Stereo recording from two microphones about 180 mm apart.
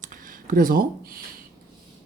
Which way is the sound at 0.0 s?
50° right (ahead or behind).